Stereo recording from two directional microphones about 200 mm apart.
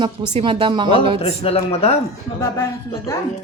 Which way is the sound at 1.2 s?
30° left (ahead or behind).